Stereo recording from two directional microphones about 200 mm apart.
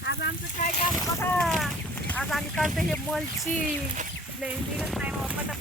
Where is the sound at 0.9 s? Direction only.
10° left (ahead or behind).